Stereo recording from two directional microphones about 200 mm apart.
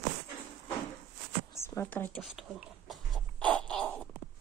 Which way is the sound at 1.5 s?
15° left (ahead or behind).